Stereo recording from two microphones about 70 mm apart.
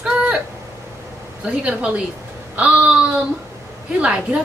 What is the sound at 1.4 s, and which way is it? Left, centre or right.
A woman's voice, centre.